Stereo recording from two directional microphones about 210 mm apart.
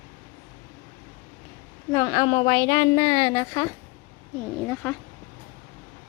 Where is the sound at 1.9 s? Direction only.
15° left (ahead or behind).